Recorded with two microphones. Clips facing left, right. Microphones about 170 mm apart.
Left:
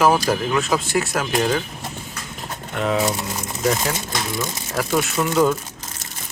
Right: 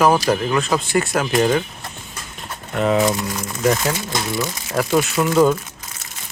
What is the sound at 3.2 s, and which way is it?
Speech, 25° left (ahead or behind).